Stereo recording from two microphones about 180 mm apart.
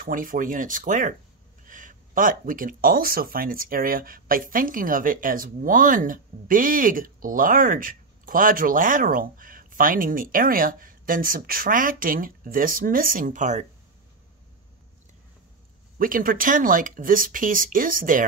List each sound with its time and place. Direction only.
0.0 s speech: 50° right (ahead or behind)
16.0 s speech: 50° right (ahead or behind)